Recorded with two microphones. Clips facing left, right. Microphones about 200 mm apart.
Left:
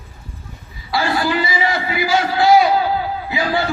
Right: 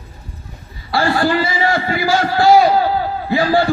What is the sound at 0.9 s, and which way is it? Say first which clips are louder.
A man's voice: right 3 dB; 55° right (ahead or behind).